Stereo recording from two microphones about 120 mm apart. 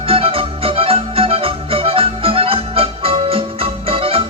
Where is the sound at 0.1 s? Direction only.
50° right (ahead or behind).